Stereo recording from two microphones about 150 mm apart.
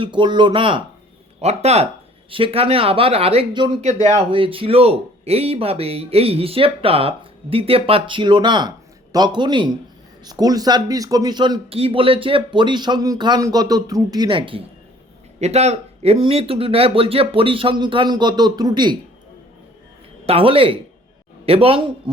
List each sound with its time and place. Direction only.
0.0 s speech: 30° right (ahead or behind)
1.4 s speech: 45° right (ahead or behind); by 3.8 s 30° right (ahead or behind)
3.8 s speech: 45° right (ahead or behind)
15.4 s speech: 45° right (ahead or behind); by 18.9 s 30° right (ahead or behind)
20.2 s speech: 40° right (ahead or behind)